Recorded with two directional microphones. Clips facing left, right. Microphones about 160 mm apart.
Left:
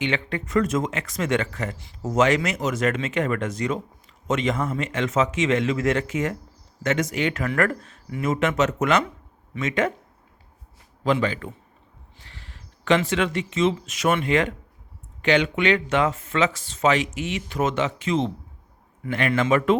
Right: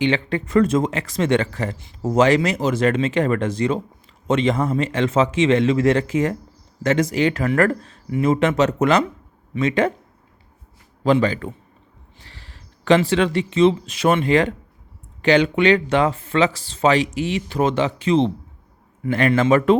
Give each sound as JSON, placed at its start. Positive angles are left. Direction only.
{"t": 0.0, "sound": "speech", "side_deg": -30}
{"t": 11.0, "sound": "speech", "side_deg": -35}